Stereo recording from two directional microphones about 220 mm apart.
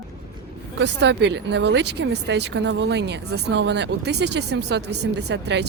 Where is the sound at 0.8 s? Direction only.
50° right (ahead or behind).